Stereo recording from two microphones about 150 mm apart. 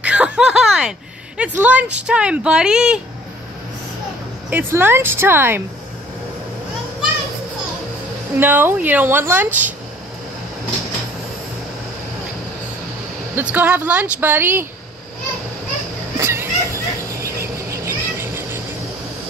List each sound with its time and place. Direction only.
0.0 s snicker: 5° right (ahead or behind)
1.4 s speech: 10° right (ahead or behind)
4.5 s speech: 15° right (ahead or behind)
8.4 s speech: 15° right (ahead or behind)
13.3 s speech: 10° right (ahead or behind)
16.2 s a sound: 15° right (ahead or behind)